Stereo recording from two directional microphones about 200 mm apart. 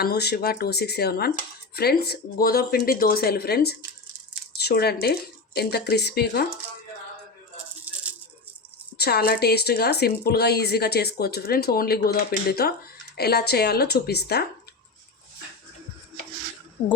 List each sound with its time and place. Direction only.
0.0 s a woman's voice: 55° left (ahead or behind)
9.0 s a woman's voice: 55° left (ahead or behind)